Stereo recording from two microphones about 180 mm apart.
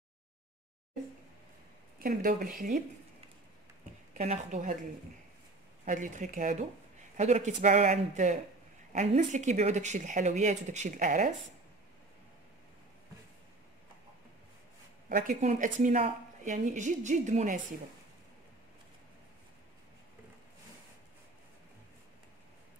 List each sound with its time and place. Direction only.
2.0 s speech: 50° right (ahead or behind)
4.1 s speech: 40° right (ahead or behind)
5.9 s speech: 45° right (ahead or behind)
15.0 s speech: 50° right (ahead or behind)